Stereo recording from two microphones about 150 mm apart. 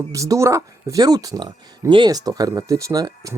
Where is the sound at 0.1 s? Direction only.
20° right (ahead or behind).